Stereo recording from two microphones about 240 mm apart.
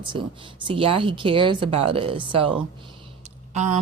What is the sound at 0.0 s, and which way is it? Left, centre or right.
Speech, centre.